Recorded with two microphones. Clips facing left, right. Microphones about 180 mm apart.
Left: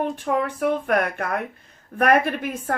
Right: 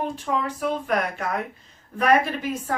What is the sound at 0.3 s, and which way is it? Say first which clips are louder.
Speech: left 3 dB; 55° left (ahead or behind).